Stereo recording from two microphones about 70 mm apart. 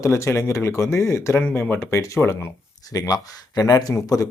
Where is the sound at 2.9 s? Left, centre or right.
Left.